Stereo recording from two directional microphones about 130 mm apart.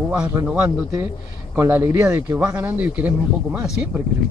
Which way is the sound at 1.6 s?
20° right (ahead or behind).